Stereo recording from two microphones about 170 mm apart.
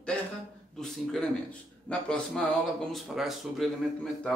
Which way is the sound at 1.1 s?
5° left (ahead or behind).